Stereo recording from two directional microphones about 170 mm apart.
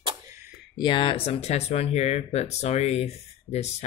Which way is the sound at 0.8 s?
30° left (ahead or behind).